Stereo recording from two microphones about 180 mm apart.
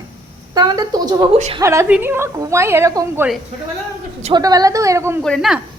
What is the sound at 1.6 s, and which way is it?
A woman's voice, 15° right (ahead or behind).